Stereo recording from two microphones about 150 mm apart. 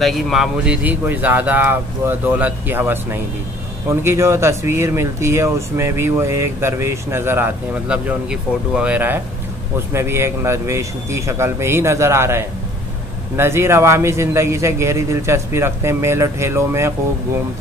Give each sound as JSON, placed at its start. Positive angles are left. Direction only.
{"t": 0.0, "sound": "speech", "side_deg": 0}